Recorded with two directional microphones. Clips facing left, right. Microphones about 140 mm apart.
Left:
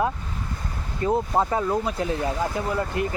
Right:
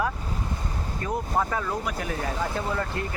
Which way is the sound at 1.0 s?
25° left (ahead or behind).